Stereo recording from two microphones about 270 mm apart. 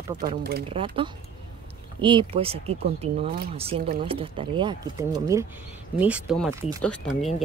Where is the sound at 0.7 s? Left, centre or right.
Centre.